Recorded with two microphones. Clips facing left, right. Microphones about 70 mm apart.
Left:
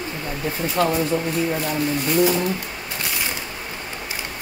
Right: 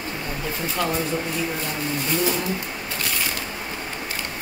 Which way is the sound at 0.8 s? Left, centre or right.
Left.